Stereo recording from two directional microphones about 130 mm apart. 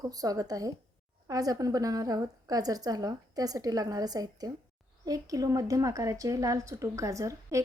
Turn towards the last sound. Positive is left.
turn(degrees=-25)  # may be behind; listen again after turning